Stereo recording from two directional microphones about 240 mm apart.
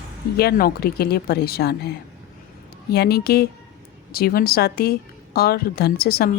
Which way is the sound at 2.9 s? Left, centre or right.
Left.